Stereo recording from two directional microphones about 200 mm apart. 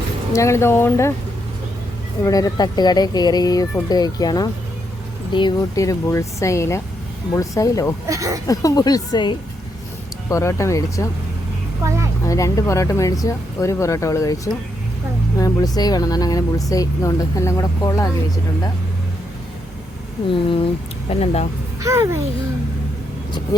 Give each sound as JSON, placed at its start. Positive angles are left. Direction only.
{"t": 0.3, "sound": "speech", "side_deg": 15}
{"t": 2.2, "sound": "speech", "side_deg": 20}
{"t": 8.0, "sound": "speech", "side_deg": -15}
{"t": 8.4, "sound": "speech", "side_deg": 15}
{"t": 11.8, "sound": "vehicle", "side_deg": -15}
{"t": 12.2, "sound": "speech", "side_deg": 15}
{"t": 21.1, "sound": "speech", "side_deg": 30}
{"t": 21.8, "sound": "a child's voice", "side_deg": -15}